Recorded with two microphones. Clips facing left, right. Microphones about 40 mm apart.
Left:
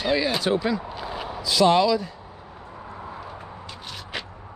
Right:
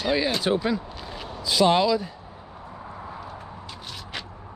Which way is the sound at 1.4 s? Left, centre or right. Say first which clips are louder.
Left 1 dB; left.